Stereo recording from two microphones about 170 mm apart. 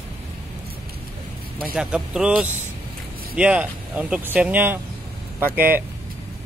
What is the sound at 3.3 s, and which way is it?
Speech, 5° right (ahead or behind).